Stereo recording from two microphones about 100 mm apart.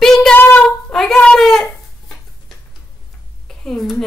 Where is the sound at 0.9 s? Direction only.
5° left (ahead or behind).